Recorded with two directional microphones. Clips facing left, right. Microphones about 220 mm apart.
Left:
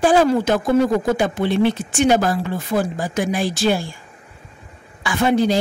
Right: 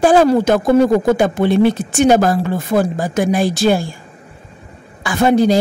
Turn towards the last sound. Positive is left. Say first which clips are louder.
# right 4 dB
turn(degrees=-40)  # may be behind; listen again after turning